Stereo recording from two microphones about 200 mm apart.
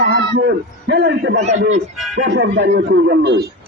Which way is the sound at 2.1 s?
60° right (ahead or behind).